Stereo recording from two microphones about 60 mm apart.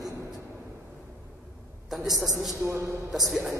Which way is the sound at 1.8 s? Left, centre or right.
Centre.